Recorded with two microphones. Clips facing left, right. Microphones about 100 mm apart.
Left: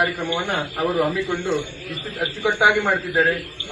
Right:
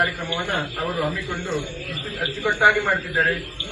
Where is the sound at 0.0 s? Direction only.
Centre (ahead or behind).